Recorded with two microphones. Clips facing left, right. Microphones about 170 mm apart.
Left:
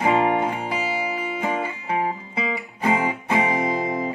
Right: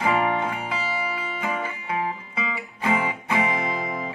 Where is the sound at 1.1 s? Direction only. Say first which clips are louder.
Left 4 dB; 20° left (ahead or behind).